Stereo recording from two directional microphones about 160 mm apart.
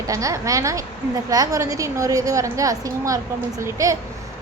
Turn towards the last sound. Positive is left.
turn(degrees=-20)  # may be behind; listen again after turning